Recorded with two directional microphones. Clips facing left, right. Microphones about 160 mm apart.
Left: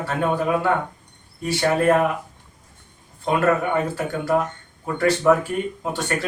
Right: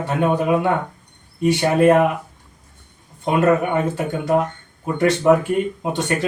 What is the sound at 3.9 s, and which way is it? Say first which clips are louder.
A man's voice: right 2 dB; 20° right (ahead or behind).